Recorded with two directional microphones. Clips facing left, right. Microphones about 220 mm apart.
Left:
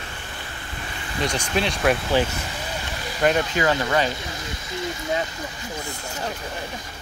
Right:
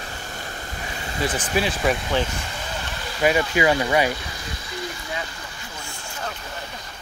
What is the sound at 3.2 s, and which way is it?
Speech, 10° right (ahead or behind).